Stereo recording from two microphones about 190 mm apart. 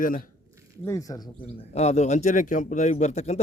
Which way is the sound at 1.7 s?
35° left (ahead or behind).